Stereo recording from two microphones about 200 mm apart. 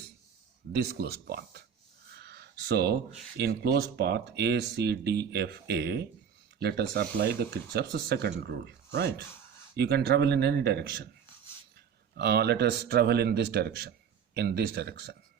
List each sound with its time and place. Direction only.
0.7 s speech: 50° right (ahead or behind)
2.1 s a sound: 55° right (ahead or behind)
3.3 s speech: 55° right (ahead or behind)
12.1 s speech: 55° right (ahead or behind)